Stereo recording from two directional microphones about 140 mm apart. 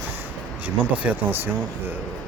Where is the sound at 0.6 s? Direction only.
15° right (ahead or behind).